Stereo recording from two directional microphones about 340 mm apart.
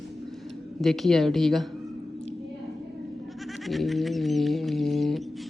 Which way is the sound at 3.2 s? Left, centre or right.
Centre.